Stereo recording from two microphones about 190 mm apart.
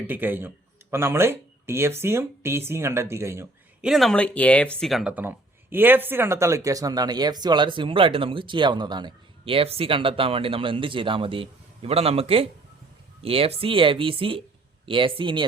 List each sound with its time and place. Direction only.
0.1 s speech: 10° right (ahead or behind)
3.8 s speech: centre (ahead or behind); by 15.4 s 25° right (ahead or behind)